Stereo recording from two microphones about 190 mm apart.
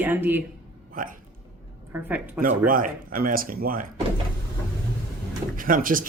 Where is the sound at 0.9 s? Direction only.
45° right (ahead or behind).